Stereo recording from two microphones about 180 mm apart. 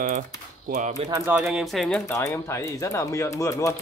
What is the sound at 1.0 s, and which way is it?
Speech, 15° right (ahead or behind).